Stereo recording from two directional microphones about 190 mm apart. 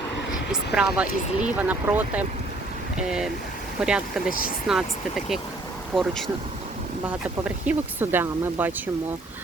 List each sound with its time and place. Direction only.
0.5 s speech: 5° right (ahead or behind)
4.3 s speech: 45° left (ahead or behind)
4.7 s speech: centre (ahead or behind)
7.4 s speech: 5° right (ahead or behind)